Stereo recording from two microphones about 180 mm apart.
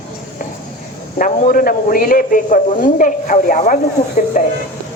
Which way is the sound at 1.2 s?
50° left (ahead or behind).